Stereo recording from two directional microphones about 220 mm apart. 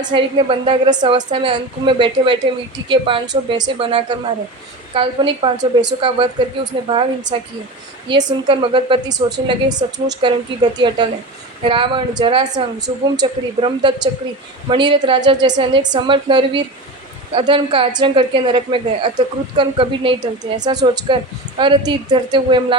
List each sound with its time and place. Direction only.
0.0 s a woman's voice: 20° right (ahead or behind)